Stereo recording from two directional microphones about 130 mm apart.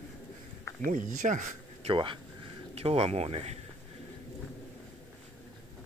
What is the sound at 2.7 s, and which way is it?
Speech, 50° right (ahead or behind).